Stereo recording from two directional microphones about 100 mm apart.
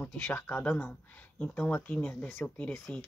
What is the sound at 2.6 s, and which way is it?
Speech, 10° left (ahead or behind).